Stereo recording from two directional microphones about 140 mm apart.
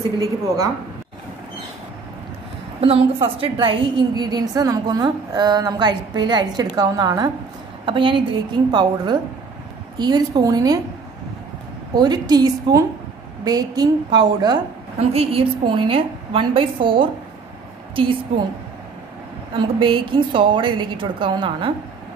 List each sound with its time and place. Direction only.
2.8 s a woman's voice: 45° right (ahead or behind); by 10.8 s 25° right (ahead or behind)
11.9 s a woman's voice: 30° right (ahead or behind)
15.0 s a woman's voice: 45° right (ahead or behind)
19.5 s a woman's voice: 40° right (ahead or behind)